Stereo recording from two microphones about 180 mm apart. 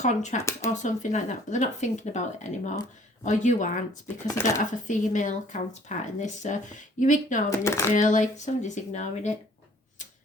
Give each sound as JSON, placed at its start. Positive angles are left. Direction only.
{"t": 0.0, "sound": "speech", "side_deg": 40}
{"t": 7.6, "sound": "speech", "side_deg": 15}
{"t": 7.9, "sound": "speech", "side_deg": 45}